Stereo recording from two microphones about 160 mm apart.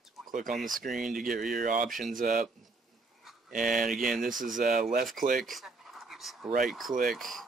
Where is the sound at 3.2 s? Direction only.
Centre (ahead or behind).